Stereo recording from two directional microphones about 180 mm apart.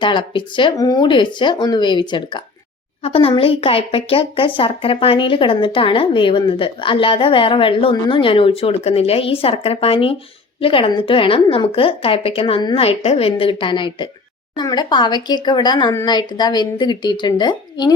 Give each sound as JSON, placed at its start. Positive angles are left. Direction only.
{"t": 0.0, "sound": "a woman's voice", "side_deg": 25}